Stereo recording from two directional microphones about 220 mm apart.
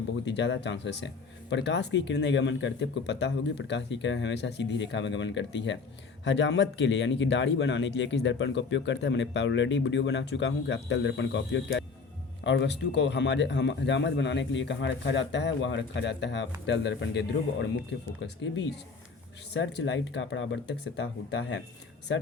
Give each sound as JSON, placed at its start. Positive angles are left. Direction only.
{"t": 0.3, "sound": "speech", "side_deg": 55}